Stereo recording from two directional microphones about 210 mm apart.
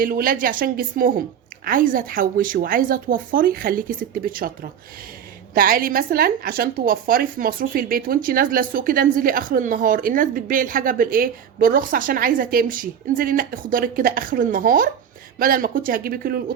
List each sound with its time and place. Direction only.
0.0 s a woman's voice: 40° right (ahead or behind)
5.5 s a woman's voice: 45° right (ahead or behind)